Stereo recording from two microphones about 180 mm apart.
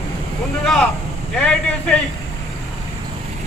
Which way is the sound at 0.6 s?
5° left (ahead or behind).